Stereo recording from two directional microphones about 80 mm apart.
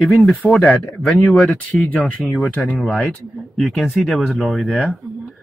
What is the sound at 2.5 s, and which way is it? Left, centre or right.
Speech, centre.